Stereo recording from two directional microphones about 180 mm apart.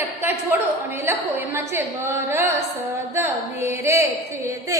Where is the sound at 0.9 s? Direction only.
10° right (ahead or behind).